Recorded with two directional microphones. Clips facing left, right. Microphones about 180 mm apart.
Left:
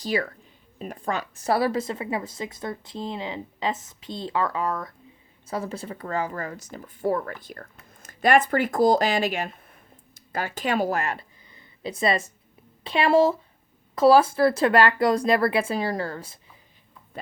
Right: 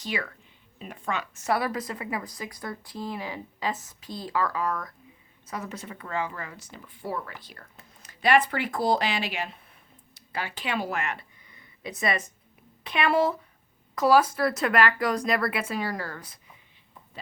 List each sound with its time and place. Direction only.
0.0 s a woman's voice: 35° left (ahead or behind)